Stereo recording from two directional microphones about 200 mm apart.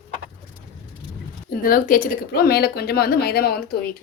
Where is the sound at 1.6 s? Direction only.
45° left (ahead or behind).